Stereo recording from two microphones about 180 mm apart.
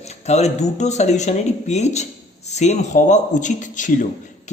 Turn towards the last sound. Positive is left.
turn(degrees=45)  # may be behind; listen again after turning